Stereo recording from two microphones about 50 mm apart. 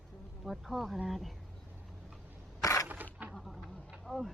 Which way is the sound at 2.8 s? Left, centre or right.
Right.